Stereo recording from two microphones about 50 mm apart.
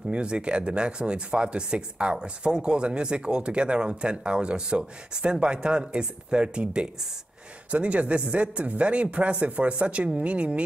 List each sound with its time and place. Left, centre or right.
0.1 s speech: right